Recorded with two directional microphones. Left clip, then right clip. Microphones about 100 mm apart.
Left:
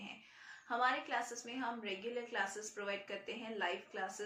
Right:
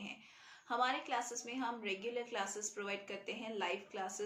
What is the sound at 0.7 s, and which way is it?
A woman's voice, 35° right (ahead or behind).